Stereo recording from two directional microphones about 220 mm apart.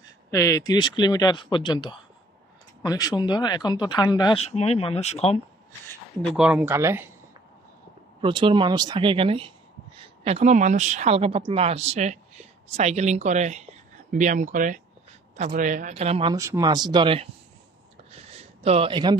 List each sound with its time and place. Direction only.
0.3 s speech: 15° left (ahead or behind)
6.3 s speech: 5° right (ahead or behind)
8.2 s a woman's voice: 25° right (ahead or behind)
16.3 s speech: 15° right (ahead or behind)
18.4 s a man's voice: 25° right (ahead or behind)